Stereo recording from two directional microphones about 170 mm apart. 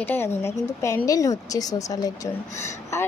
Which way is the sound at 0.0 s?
15° left (ahead or behind).